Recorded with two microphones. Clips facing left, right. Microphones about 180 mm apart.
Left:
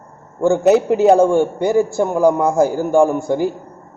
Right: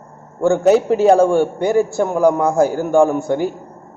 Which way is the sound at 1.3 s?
15° left (ahead or behind).